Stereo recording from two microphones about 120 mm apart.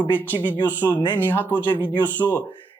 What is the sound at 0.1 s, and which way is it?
Speech, 15° left (ahead or behind).